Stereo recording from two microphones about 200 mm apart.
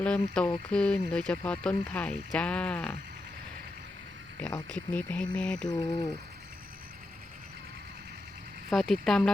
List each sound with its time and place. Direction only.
0.0 s speech: 5° left (ahead or behind)
4.4 s speech: 5° left (ahead or behind)
5.6 s speech: 20° left (ahead or behind)
8.7 s speech: centre (ahead or behind)